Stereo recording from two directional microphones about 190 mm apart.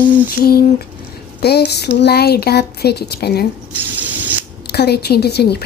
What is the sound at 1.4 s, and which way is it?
A woman's voice, 60° left (ahead or behind).